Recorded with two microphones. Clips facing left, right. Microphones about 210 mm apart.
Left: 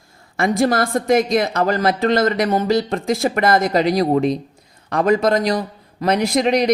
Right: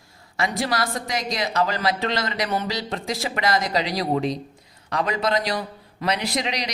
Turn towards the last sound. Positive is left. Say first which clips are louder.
# left 10 dB
turn(degrees=50)  # may be behind; listen again after turning